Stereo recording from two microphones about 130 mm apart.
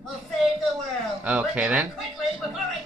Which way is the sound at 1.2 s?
10° right (ahead or behind).